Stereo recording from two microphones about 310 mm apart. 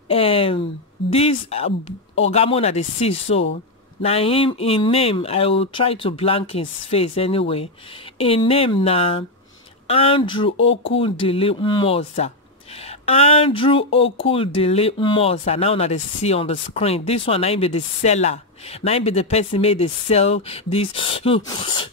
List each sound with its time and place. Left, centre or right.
0.1 s a sound: centre
1.1 s speech: centre
10.6 s speech: left
11.0 s speech: centre